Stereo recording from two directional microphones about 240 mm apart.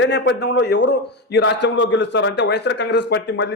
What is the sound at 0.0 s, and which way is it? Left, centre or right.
A man's voice, left.